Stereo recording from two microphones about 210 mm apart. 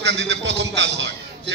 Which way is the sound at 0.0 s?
55° right (ahead or behind).